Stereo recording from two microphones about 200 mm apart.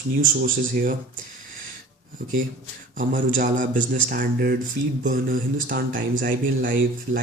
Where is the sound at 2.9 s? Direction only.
40° right (ahead or behind).